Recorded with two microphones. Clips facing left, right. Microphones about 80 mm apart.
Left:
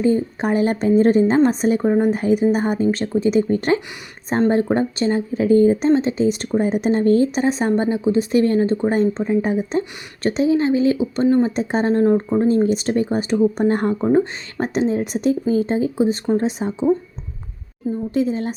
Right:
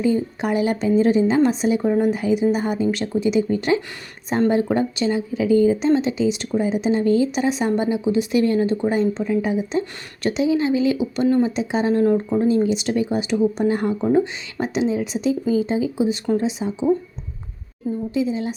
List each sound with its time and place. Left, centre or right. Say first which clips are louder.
0.0 s a woman's voice: left 2 dB; left
11.4 s speech: left 1 dB; left
14.0 s speech: left 1 dB; left
14.6 s a woman's voice: left 2 dB; left
18.1 s a woman's voice: left 2 dB; left